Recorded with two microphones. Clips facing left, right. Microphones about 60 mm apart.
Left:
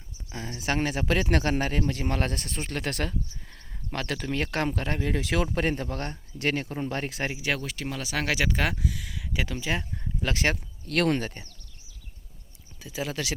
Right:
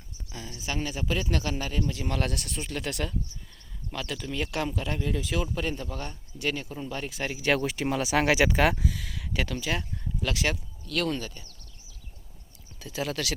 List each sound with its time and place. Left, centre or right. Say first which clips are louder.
0.3 s speech: left 4 dB; left
0.5 s speech: left 5 dB; left
7.6 s speech: right 6 dB; centre
9.6 s speech: left 1 dB; left
10.3 s speech: left 3 dB; left
10.8 s speech: left 4 dB; left
12.8 s speech: right 1 dB; centre